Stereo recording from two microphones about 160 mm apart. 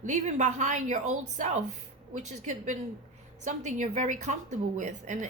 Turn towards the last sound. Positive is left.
turn(degrees=-50)  # may be behind; listen again after turning